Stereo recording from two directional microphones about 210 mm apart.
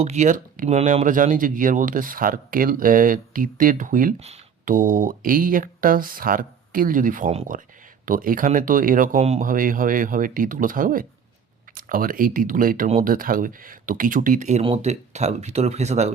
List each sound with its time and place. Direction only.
0.0 s speech: 35° right (ahead or behind)